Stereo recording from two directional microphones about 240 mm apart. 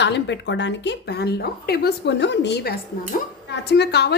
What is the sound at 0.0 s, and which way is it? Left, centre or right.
A woman's voice, left.